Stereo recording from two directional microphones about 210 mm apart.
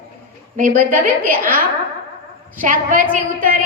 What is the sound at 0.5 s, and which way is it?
A woman's voice, 40° right (ahead or behind).